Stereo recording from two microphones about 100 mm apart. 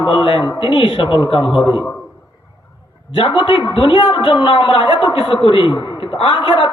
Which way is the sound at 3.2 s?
65° left (ahead or behind).